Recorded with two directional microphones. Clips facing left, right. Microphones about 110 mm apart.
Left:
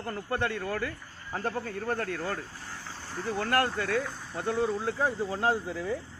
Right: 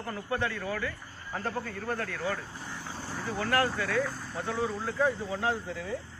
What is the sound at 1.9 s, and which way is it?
Speech, 45° left (ahead or behind).